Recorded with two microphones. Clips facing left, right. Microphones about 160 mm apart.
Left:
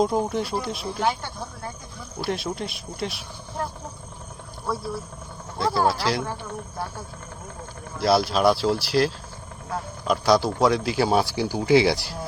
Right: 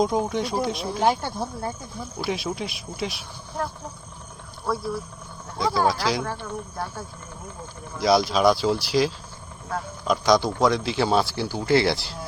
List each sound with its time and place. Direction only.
0.0 s speech: centre (ahead or behind)
1.0 s speech: 40° right (ahead or behind)
2.1 s speech: centre (ahead or behind)
5.5 s speech: 5° left (ahead or behind)
7.9 s speech: 5° left (ahead or behind)